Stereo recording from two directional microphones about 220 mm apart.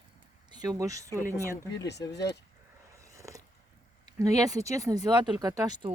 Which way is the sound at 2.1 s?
50° left (ahead or behind).